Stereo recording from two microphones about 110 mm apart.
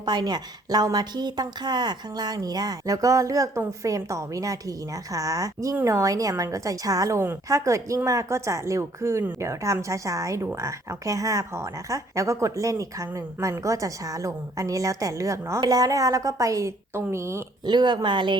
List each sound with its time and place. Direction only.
0.0 s a woman's voice: 40° right (ahead or behind); by 17.4 s 25° right (ahead or behind)
17.7 s speech: 40° right (ahead or behind)